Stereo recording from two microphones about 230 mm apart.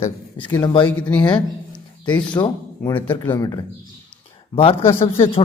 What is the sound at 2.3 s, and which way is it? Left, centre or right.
Speech, centre.